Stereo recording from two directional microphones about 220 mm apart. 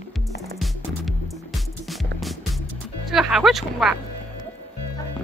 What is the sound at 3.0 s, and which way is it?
Speech, centre (ahead or behind).